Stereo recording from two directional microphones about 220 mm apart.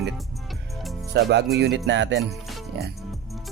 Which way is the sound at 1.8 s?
55° right (ahead or behind).